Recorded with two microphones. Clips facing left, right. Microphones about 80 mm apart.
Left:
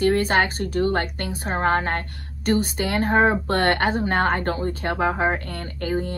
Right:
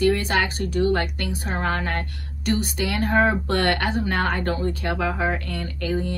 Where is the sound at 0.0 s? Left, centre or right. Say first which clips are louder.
Left 2 dB; left.